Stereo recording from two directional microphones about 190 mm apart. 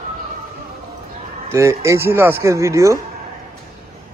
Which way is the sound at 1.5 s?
15° right (ahead or behind).